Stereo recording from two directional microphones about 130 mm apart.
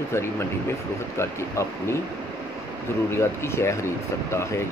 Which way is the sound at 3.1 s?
20° left (ahead or behind).